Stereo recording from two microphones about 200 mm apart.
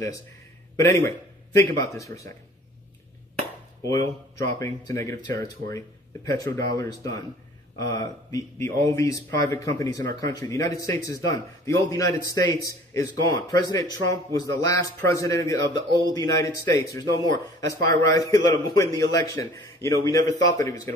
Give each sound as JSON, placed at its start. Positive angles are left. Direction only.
{"t": 1.5, "sound": "a man's voice", "side_deg": 15}
{"t": 3.8, "sound": "a man's voice", "side_deg": 15}